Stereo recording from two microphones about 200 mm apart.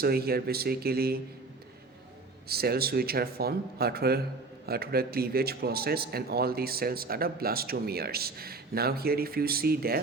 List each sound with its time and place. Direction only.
0.0 s a man's voice: 50° right (ahead or behind)
2.5 s a man's voice: 50° right (ahead or behind)